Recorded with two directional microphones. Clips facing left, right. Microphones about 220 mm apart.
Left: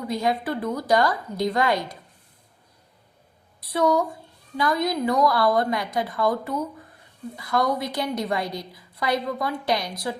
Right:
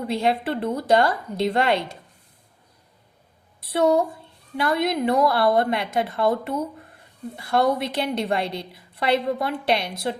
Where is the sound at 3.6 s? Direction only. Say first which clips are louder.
Right 2 dB; 25° right (ahead or behind).